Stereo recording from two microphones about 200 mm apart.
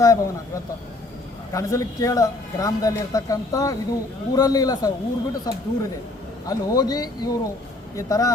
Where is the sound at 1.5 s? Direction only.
15° left (ahead or behind).